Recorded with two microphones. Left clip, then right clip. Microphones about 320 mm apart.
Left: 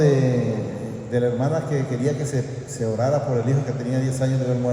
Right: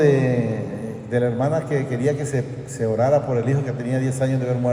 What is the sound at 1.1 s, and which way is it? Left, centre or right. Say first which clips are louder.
A man's voice: right 1 dB; right.